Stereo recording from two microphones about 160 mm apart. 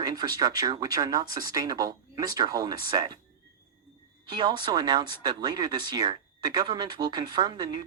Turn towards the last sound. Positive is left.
turn(degrees=-30)  # may be behind; listen again after turning